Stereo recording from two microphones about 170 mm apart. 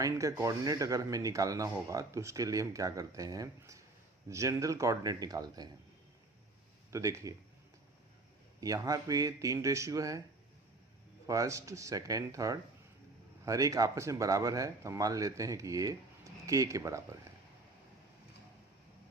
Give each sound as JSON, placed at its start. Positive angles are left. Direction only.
{"t": 0.0, "sound": "speech", "side_deg": -20}
{"t": 6.9, "sound": "a man's voice", "side_deg": -15}
{"t": 8.6, "sound": "speech", "side_deg": -20}
{"t": 11.3, "sound": "speech", "side_deg": -20}